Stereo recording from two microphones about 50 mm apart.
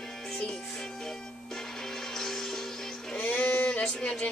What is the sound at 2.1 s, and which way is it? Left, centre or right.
Music, centre.